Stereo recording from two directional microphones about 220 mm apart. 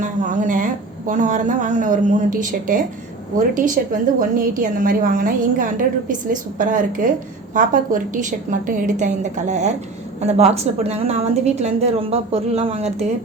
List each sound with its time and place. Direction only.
0.0 s a woman's voice: 35° right (ahead or behind)